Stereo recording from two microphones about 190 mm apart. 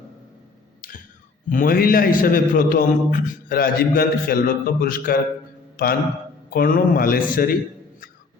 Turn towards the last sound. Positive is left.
turn(degrees=50)  # may be behind; listen again after turning